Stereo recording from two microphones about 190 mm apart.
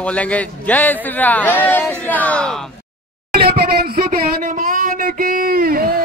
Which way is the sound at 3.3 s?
55° right (ahead or behind).